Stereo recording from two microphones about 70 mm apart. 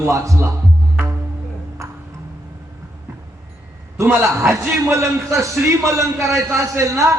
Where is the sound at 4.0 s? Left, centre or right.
Right.